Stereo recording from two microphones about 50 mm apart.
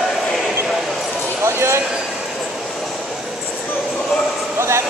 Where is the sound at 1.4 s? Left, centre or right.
Right.